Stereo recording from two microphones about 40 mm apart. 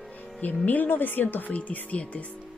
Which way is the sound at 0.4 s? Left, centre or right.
Left.